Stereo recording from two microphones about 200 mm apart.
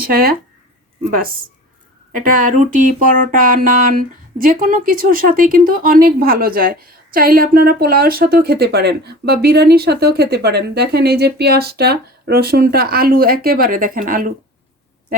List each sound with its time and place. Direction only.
0.0 s speech: 45° right (ahead or behind)
2.1 s speech: 45° right (ahead or behind)